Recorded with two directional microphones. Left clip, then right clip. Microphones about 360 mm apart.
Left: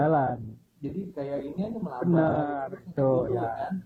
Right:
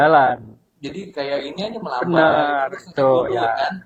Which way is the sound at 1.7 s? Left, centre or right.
Centre.